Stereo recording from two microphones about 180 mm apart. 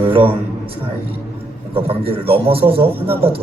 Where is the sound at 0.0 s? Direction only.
30° right (ahead or behind).